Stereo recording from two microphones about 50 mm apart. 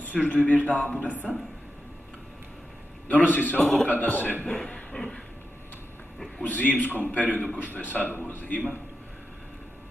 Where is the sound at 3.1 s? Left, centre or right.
Left.